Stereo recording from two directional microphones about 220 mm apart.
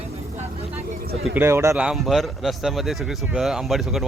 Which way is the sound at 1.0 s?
45° right (ahead or behind).